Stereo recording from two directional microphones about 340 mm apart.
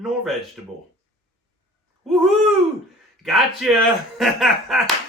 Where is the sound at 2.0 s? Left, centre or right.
Centre.